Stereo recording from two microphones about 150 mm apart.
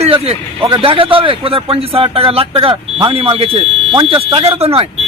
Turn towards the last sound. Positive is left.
turn(degrees=-40)  # may be behind; listen again after turning